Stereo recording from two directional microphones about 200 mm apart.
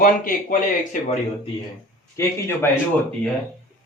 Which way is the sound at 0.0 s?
45° left (ahead or behind).